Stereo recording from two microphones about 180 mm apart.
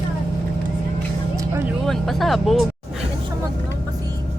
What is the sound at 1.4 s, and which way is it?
Vehicle, 15° right (ahead or behind).